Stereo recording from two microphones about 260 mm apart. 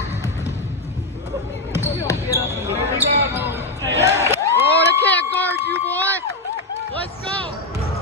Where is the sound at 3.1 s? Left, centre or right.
Right.